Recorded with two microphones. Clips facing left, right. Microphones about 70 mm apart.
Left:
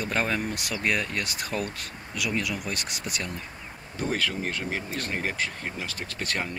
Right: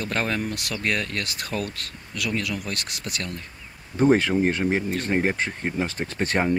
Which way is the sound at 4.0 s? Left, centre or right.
Right.